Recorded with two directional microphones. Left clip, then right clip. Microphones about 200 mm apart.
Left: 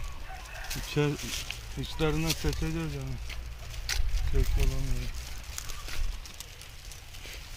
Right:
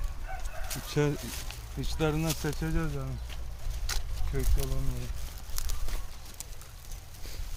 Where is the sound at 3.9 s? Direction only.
Centre (ahead or behind).